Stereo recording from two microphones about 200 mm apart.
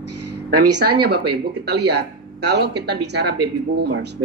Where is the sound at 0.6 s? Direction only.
55° right (ahead or behind).